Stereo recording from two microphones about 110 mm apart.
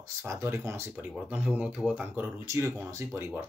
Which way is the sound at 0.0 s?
25° right (ahead or behind).